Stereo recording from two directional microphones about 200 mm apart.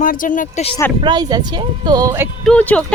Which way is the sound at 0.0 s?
45° left (ahead or behind).